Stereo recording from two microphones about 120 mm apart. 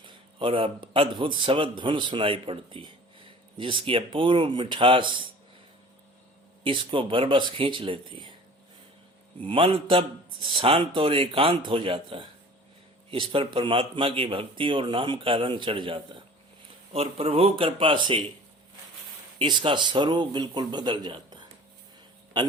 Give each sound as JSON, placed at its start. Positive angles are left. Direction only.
{"t": 0.0, "sound": "a man's voice", "side_deg": -50}
{"t": 6.7, "sound": "a man's voice", "side_deg": -45}
{"t": 9.4, "sound": "a man's voice", "side_deg": -45}
{"t": 16.9, "sound": "a man's voice", "side_deg": -55}
{"t": 19.4, "sound": "speech", "side_deg": -40}